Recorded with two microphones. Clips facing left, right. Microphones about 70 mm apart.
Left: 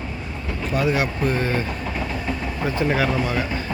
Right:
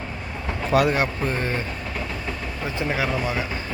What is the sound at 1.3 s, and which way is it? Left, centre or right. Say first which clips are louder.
Speech: left 3 dB; right.